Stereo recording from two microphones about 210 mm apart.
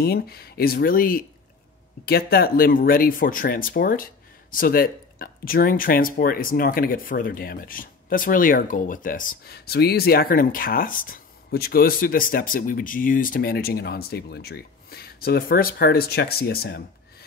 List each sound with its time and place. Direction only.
0.0 s speech: 45° left (ahead or behind)